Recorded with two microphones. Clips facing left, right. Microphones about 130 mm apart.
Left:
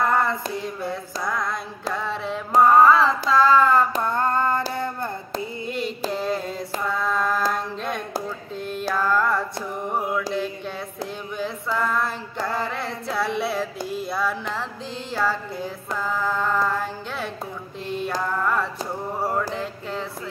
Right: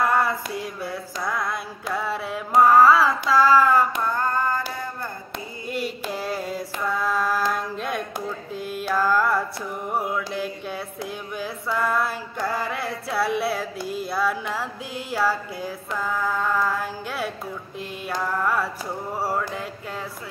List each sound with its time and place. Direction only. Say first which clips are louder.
0.0 s music: even; 5° right (ahead or behind)
2.0 s mantra: right 2 dB; 5° right (ahead or behind)
2.8 s carnatic music: even; 5° right (ahead or behind)
4.1 s a sound: left 2 dB; 25° left (ahead or behind)
6.1 s mantra: left 2 dB; 5° right (ahead or behind)
7.5 s a sound: even; 5° right (ahead or behind)
8.5 s mantra: right 1 dB; 5° right (ahead or behind)
9.8 s music: left 1 dB; 5° right (ahead or behind)
11.3 s a sound: left 1 dB; 5° right (ahead or behind)